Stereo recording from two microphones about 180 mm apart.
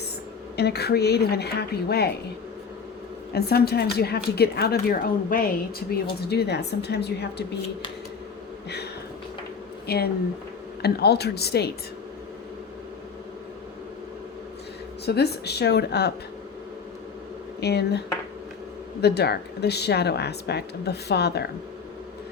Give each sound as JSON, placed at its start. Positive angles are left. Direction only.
{"t": 0.5, "sound": "a woman's voice", "side_deg": 65}
{"t": 3.3, "sound": "a woman's voice", "side_deg": 60}
{"t": 9.8, "sound": "a woman's voice", "side_deg": 60}
{"t": 15.0, "sound": "a woman's voice", "side_deg": 65}
{"t": 17.6, "sound": "a woman's voice", "side_deg": 65}
{"t": 19.0, "sound": "speech", "side_deg": 65}